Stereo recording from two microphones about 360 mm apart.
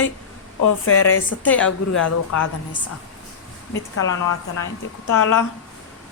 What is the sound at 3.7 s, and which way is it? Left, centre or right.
Speech, left.